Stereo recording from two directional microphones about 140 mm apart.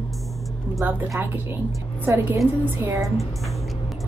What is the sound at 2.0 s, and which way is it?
Speech, 15° right (ahead or behind).